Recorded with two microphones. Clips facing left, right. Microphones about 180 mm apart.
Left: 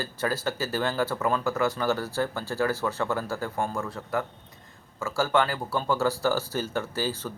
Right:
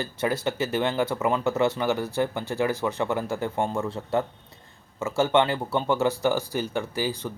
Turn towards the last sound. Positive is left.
turn(degrees=-15)  # may be behind; listen again after turning